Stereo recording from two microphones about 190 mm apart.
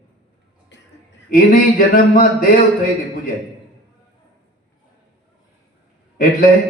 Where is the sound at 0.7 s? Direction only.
65° left (ahead or behind).